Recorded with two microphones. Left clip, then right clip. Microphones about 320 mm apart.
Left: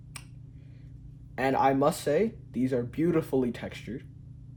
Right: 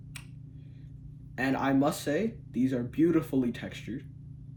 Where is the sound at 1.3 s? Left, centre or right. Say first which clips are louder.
Left 4 dB; left.